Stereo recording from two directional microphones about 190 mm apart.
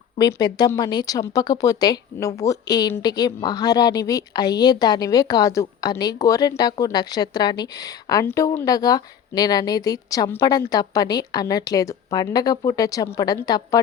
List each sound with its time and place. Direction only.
0.2 s speech: 20° left (ahead or behind)